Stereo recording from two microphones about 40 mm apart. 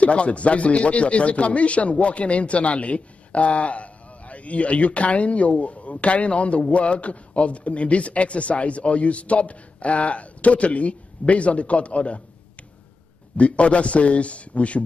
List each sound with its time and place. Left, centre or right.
0.0 s speech: left
13.4 s speech: left